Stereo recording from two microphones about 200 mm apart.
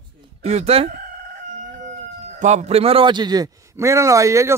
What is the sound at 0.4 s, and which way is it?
Speech, 30° right (ahead or behind).